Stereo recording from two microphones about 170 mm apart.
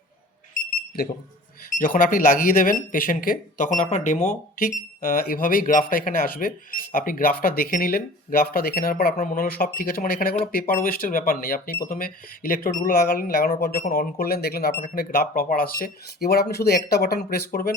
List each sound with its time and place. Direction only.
0.9 s speech: 65° left (ahead or behind)
1.8 s speech: 55° left (ahead or behind)